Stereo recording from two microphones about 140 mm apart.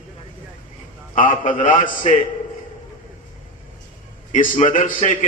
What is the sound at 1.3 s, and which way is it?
Speech, 65° left (ahead or behind).